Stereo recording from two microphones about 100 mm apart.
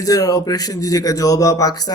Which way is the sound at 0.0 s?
35° left (ahead or behind).